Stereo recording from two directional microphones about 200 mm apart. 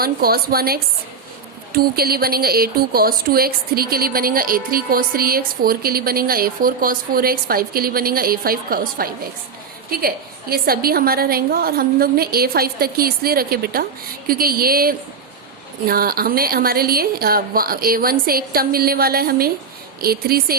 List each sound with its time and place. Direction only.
0.0 s a woman's voice: 50° right (ahead or behind)